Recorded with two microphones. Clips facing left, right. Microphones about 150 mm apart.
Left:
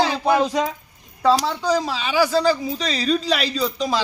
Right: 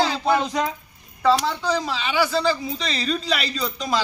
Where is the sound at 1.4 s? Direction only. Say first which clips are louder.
Left 3 dB; 40° left (ahead or behind).